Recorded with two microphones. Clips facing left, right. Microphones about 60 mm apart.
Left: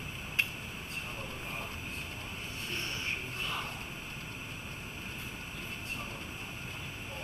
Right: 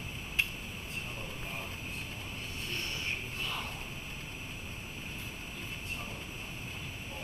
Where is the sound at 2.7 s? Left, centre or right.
Centre.